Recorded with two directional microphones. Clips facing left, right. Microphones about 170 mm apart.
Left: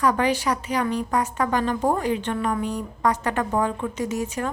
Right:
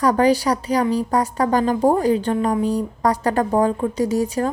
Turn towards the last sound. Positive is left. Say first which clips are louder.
# right 7 dB
turn(degrees=-35)  # may be behind; listen again after turning